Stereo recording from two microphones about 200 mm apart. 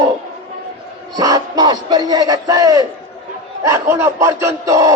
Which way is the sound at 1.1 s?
20° right (ahead or behind).